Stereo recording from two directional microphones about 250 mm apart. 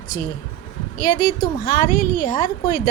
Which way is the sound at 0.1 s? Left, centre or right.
Left.